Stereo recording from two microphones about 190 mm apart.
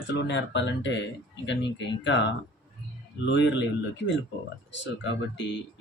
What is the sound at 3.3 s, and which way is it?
Speech, 70° left (ahead or behind).